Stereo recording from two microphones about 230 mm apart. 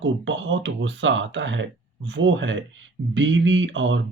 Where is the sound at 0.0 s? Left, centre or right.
Right.